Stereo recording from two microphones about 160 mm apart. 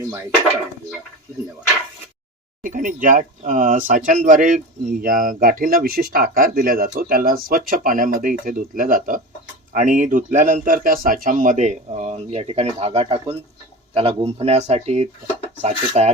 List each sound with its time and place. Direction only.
2.6 s a man's voice: 55° right (ahead or behind)